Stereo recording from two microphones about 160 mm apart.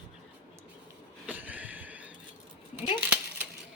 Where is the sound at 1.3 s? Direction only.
10° right (ahead or behind).